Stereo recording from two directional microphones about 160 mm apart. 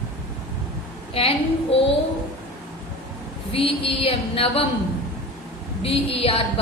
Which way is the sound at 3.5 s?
35° left (ahead or behind).